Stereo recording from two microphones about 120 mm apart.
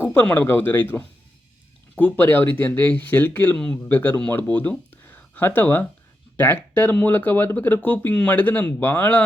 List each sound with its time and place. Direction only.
0.0 s speech: 15° left (ahead or behind)